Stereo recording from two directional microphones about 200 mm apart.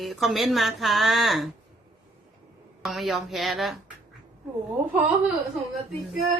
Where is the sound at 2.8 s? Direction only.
Centre (ahead or behind).